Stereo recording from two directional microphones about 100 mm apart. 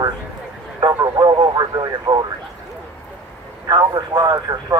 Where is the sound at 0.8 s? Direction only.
40° right (ahead or behind).